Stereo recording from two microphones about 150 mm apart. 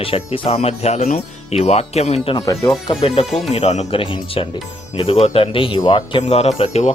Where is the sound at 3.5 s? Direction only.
45° left (ahead or behind); by 6.2 s 30° left (ahead or behind).